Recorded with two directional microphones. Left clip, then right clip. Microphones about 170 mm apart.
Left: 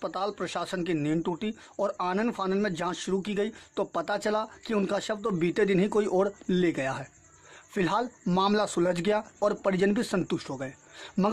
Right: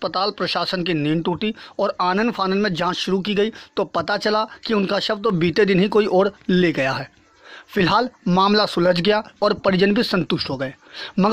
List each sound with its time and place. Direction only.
0.0 s speech: 20° right (ahead or behind)